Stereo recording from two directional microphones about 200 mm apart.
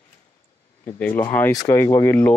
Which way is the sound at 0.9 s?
10° left (ahead or behind).